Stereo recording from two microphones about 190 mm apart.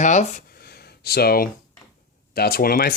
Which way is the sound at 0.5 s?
55° left (ahead or behind).